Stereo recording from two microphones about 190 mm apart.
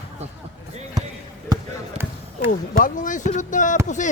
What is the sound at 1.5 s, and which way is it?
Basketball bounce, 10° right (ahead or behind).